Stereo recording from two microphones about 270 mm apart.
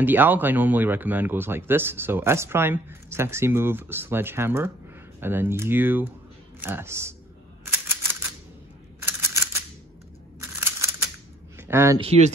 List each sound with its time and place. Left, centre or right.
0.0 s speech: centre
7.7 s typewriter: centre
9.0 s a sound: centre
12.0 s speech: right